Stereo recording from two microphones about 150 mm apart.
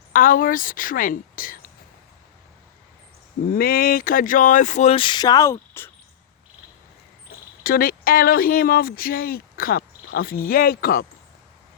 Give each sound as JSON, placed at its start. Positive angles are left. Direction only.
{"t": 0.1, "sound": "speech", "side_deg": 65}
{"t": 3.5, "sound": "speech", "side_deg": 75}
{"t": 7.6, "sound": "speech", "side_deg": 75}